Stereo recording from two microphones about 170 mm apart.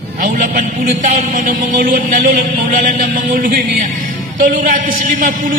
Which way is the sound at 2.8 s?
50° right (ahead or behind).